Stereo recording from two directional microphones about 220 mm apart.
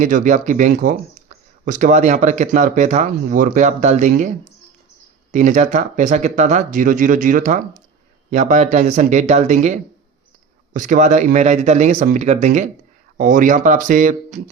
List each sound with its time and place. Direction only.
0.0 s speech: 35° right (ahead or behind)